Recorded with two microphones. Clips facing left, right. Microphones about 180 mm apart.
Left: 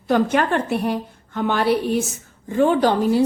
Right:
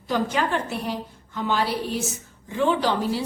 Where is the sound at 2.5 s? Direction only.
45° left (ahead or behind).